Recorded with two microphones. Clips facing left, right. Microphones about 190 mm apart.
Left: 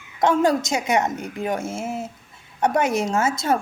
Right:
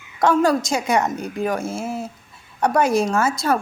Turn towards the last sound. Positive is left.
turn(degrees=20)  # may be behind; listen again after turning